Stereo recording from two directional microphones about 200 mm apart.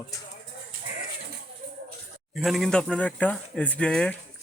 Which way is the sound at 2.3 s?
Centre (ahead or behind).